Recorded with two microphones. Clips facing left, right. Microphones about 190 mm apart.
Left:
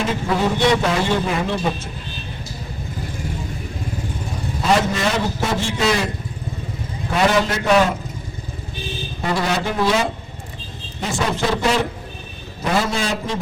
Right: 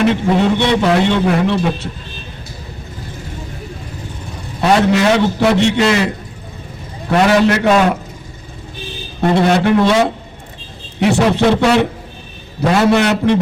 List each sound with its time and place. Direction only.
0.3 s a man's voice: 70° right (ahead or behind)
4.6 s a man's voice: 70° right (ahead or behind)
7.1 s a man's voice: 70° right (ahead or behind)
9.5 s a man's voice: 65° right (ahead or behind)